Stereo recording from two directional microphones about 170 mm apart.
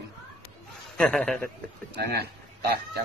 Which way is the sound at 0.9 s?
5° left (ahead or behind).